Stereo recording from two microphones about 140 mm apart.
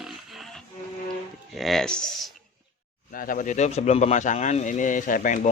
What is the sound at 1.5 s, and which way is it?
Speech, centre (ahead or behind).